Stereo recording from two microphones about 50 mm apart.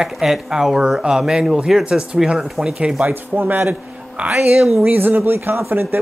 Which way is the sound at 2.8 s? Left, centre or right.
Right.